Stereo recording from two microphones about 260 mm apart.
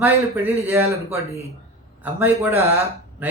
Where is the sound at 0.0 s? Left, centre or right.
Centre.